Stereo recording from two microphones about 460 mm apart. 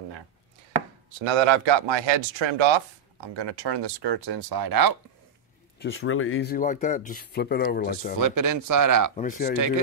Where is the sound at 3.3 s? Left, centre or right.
Right.